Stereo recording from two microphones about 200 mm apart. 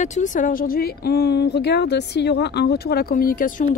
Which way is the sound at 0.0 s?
35° left (ahead or behind).